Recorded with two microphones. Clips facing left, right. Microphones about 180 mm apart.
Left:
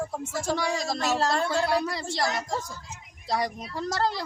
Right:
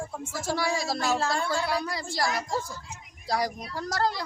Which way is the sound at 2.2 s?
25° left (ahead or behind).